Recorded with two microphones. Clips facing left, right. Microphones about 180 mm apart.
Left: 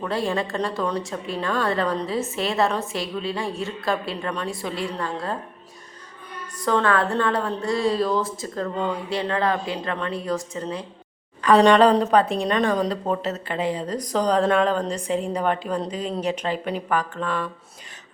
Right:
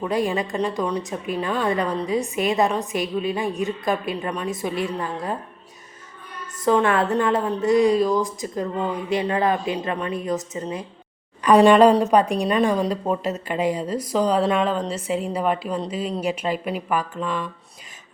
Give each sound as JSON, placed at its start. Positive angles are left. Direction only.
{"t": 0.3, "sound": "speech", "side_deg": -15}
{"t": 6.7, "sound": "speech", "side_deg": -20}
{"t": 11.4, "sound": "speech", "side_deg": -10}